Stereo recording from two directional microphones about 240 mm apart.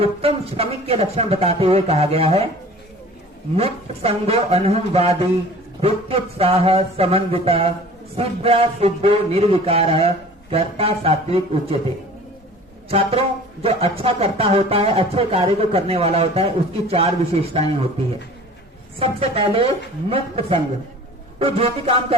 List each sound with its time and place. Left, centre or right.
0.0 s speech: right
3.5 s speech: right
12.9 s speech: right
18.9 s speech: right